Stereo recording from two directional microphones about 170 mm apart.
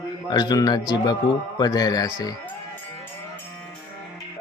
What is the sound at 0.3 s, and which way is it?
A man's voice, 25° left (ahead or behind).